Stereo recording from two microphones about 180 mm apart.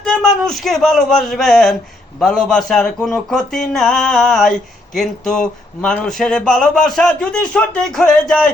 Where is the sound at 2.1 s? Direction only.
Centre (ahead or behind).